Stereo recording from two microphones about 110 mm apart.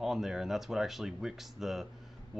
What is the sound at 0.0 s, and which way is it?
Speech, 5° right (ahead or behind).